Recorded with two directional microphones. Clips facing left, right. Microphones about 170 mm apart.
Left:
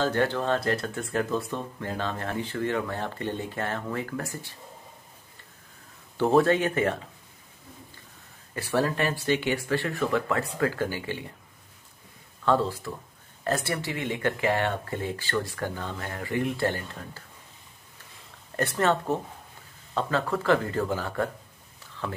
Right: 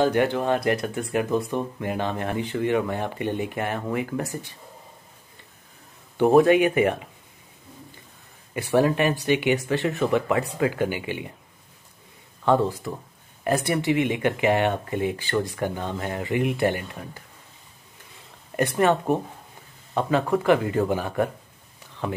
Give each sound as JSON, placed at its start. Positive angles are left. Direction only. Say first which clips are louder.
{"t": 0.0, "sound": "speech", "louder": "right 4 dB", "side_deg": -15}
{"t": 6.1, "sound": "speech", "louder": "right 5 dB", "side_deg": -15}
{"t": 8.5, "sound": "speech", "louder": "right 5 dB", "side_deg": -15}
{"t": 12.4, "sound": "speech", "louder": "right 3 dB", "side_deg": -15}
{"t": 18.6, "sound": "speech", "louder": "right 4 dB", "side_deg": -15}